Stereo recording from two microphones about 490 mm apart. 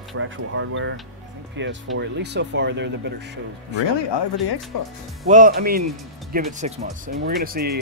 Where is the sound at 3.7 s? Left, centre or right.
Left.